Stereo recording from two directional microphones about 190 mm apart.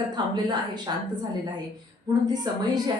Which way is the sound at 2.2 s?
20° right (ahead or behind).